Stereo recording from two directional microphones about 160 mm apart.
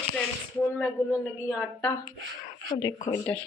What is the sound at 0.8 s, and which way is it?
Speech, 10° left (ahead or behind).